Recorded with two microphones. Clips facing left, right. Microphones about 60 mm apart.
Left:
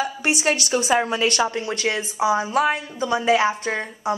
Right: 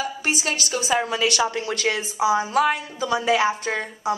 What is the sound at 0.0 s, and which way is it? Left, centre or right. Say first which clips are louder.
A woman's voice: left 3 dB; left.